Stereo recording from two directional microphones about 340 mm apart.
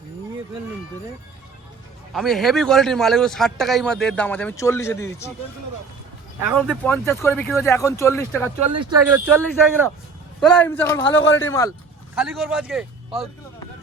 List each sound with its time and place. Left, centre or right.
2.1 s speech: centre
6.5 s speech: centre
8.4 s speech: centre
10.4 s speech: centre
11.0 s a man's voice: left
12.1 s speech: centre